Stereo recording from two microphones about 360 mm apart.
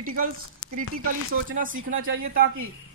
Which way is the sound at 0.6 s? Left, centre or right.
Left.